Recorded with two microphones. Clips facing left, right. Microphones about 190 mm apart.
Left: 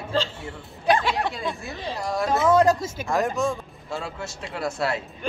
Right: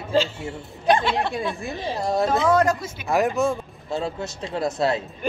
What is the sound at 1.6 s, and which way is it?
Speech, 15° right (ahead or behind).